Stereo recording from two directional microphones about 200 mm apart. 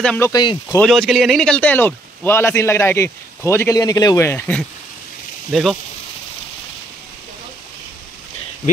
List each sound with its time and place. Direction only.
0.0 s speech: 5° left (ahead or behind)
0.3 s speech: 20° left (ahead or behind)
0.7 s a man's voice: centre (ahead or behind)